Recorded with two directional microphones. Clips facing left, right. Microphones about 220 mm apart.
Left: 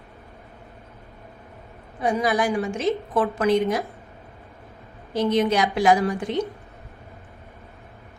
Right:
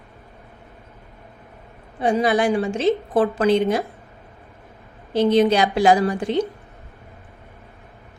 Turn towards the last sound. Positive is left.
turn(degrees=-30)  # may be behind; listen again after turning